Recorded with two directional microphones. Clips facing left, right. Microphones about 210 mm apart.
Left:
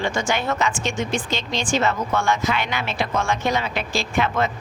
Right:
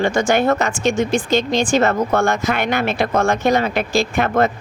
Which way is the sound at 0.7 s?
40° right (ahead or behind).